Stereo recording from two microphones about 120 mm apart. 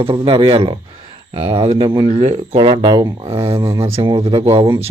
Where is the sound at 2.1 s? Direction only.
65° right (ahead or behind); by 3.1 s 40° right (ahead or behind).